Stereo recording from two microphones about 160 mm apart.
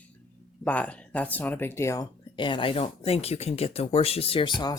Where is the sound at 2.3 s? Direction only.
30° left (ahead or behind).